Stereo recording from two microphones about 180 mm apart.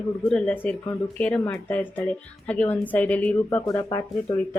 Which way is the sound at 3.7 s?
20° left (ahead or behind).